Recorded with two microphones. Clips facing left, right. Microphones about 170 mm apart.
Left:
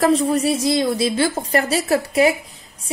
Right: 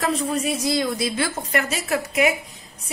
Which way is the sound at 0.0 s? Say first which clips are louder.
Left 7 dB; 35° left (ahead or behind).